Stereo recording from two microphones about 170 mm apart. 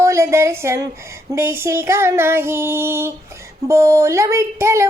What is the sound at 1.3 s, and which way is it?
Female singing, 15° right (ahead or behind).